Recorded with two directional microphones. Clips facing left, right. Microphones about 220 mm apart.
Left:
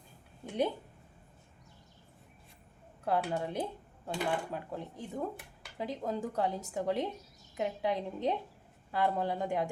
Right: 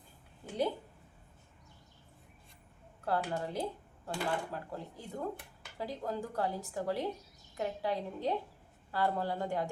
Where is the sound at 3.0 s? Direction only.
15° left (ahead or behind).